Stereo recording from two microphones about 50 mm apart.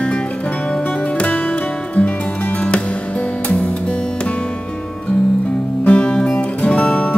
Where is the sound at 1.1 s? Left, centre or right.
Left.